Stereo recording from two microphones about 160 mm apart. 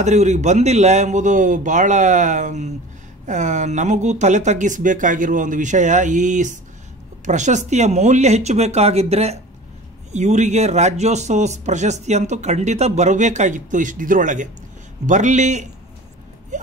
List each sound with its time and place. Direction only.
0.0 s speech: 45° right (ahead or behind)